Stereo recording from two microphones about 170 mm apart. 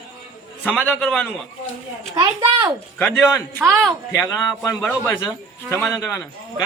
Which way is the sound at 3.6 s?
Centre (ahead or behind).